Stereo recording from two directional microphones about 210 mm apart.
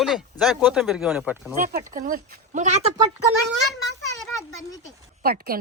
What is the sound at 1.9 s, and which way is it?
Speech, 40° right (ahead or behind).